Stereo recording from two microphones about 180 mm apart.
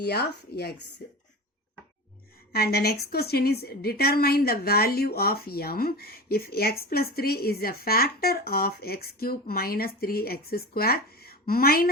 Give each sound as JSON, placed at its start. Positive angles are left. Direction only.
{"t": 0.0, "sound": "a woman's voice", "side_deg": 65}
{"t": 2.5, "sound": "a woman's voice", "side_deg": 60}